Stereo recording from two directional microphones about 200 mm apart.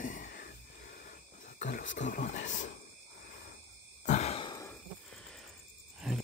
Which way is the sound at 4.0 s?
35° left (ahead or behind).